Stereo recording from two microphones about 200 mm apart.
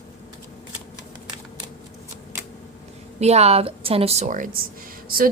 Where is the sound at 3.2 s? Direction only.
30° right (ahead or behind).